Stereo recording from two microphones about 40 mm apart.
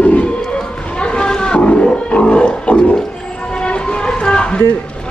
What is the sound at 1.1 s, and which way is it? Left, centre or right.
Wild animals, left.